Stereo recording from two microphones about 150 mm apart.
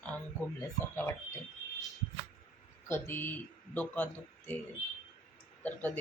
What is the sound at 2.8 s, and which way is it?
Speech, 15° left (ahead or behind).